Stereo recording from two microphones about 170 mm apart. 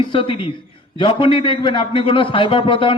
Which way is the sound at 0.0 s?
30° left (ahead or behind).